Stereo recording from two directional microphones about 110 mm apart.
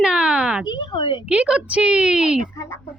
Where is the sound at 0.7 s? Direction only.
40° left (ahead or behind).